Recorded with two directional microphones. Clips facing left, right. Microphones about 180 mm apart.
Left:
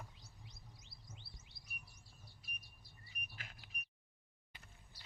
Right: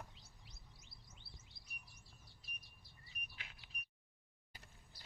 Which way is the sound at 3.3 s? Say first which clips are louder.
Left 4 dB; 45° left (ahead or behind).